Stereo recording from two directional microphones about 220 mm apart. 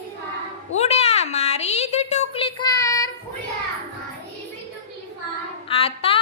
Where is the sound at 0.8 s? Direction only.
30° left (ahead or behind).